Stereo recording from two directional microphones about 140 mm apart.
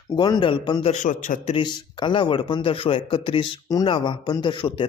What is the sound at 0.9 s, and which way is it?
Speech, 65° left (ahead or behind).